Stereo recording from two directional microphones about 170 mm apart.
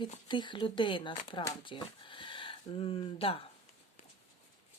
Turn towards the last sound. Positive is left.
turn(degrees=35)  # may be behind; listen again after turning